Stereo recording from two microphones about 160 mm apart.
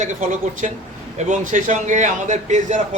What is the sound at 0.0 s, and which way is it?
A man's voice, 50° right (ahead or behind).